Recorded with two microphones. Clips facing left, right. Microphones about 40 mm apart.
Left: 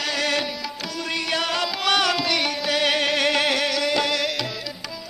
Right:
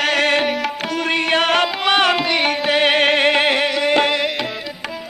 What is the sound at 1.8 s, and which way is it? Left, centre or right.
Music, right.